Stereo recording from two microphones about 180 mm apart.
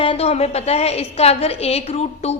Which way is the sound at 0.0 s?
30° left (ahead or behind).